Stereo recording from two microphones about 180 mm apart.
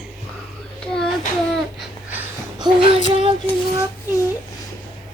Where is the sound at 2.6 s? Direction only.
30° right (ahead or behind).